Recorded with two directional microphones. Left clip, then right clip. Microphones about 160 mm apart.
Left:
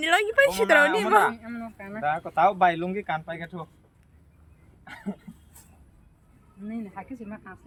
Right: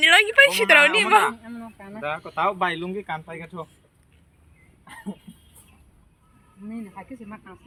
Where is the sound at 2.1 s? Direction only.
80° left; by 2.9 s 60° left (ahead or behind).